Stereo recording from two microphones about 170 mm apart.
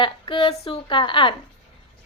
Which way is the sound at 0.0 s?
30° left (ahead or behind).